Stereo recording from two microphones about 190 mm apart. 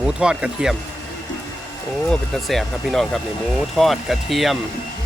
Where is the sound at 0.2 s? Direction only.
5° right (ahead or behind).